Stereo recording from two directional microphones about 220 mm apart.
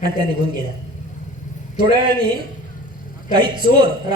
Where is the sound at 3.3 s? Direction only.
20° right (ahead or behind).